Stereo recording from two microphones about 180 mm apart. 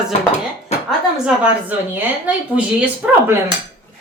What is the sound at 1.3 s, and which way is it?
Speech, 10° right (ahead or behind).